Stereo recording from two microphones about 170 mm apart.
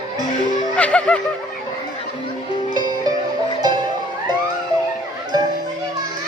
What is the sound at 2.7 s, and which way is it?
Music, 25° right (ahead or behind).